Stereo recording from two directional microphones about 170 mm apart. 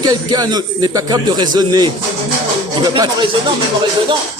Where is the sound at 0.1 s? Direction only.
25° right (ahead or behind).